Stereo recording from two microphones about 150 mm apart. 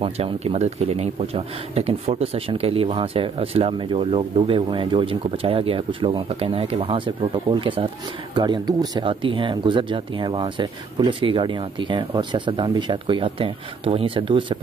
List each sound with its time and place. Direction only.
0.0 s speech: 40° right (ahead or behind)